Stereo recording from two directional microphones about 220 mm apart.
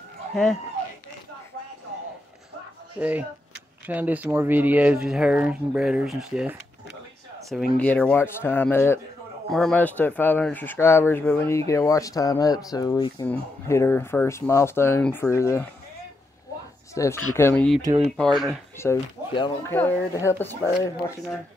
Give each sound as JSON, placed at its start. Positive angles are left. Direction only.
{"t": 0.3, "sound": "speech", "side_deg": 0}
{"t": 3.0, "sound": "speech", "side_deg": -5}
{"t": 7.7, "sound": "speech", "side_deg": 5}
{"t": 16.9, "sound": "speech", "side_deg": 15}
{"t": 17.8, "sound": "speech", "side_deg": -25}
{"t": 18.1, "sound": "speech", "side_deg": 0}
{"t": 18.8, "sound": "speech", "side_deg": 15}